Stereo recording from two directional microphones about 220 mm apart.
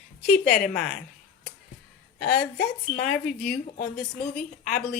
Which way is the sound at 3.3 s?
40° left (ahead or behind).